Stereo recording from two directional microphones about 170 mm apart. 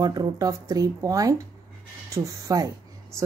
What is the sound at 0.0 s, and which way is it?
Speech, 25° right (ahead or behind).